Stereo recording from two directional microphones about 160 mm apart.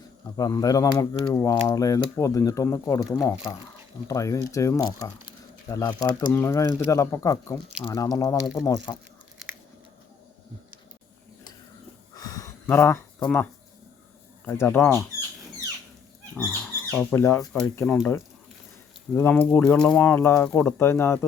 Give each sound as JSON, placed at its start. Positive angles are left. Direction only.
{"t": 0.3, "sound": "speech", "side_deg": 20}
{"t": 12.1, "sound": "a sound", "side_deg": 20}
{"t": 13.2, "sound": "speech", "side_deg": 10}
{"t": 16.4, "sound": "speech", "side_deg": 10}
{"t": 17.8, "sound": "speech", "side_deg": 0}
{"t": 19.1, "sound": "speech", "side_deg": 10}